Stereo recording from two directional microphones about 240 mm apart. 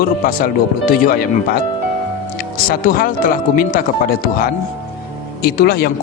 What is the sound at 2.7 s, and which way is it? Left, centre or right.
A man's voice, left.